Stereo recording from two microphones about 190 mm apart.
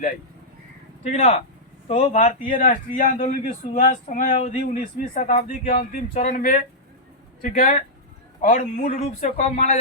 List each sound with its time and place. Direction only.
1.0 s a man's voice: 35° left (ahead or behind)